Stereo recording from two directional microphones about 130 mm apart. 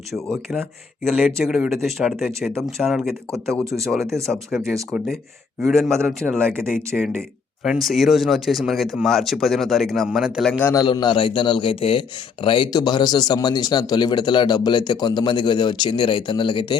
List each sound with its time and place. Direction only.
1.1 s speech: 5° right (ahead or behind)
3.7 s speech: 25° right (ahead or behind)
5.6 s speech: centre (ahead or behind)
6.0 s speech: 10° right (ahead or behind)
6.3 s speech: 5° left (ahead or behind)
10.6 s a man's voice: 20° left (ahead or behind)
10.8 s speech: 35° left (ahead or behind)